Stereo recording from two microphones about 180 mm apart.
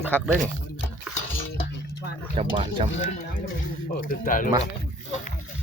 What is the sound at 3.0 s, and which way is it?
Speech, 45° left (ahead or behind).